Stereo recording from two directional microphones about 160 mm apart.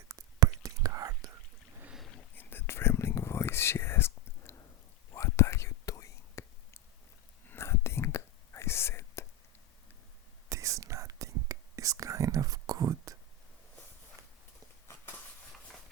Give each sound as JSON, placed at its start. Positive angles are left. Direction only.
{"t": 0.1, "sound": "whispering", "side_deg": -20}
{"t": 1.8, "sound": "boat", "side_deg": -5}
{"t": 2.3, "sound": "whispering", "side_deg": 15}
{"t": 10.5, "sound": "whispering", "side_deg": -20}
{"t": 14.8, "sound": "a sound", "side_deg": 15}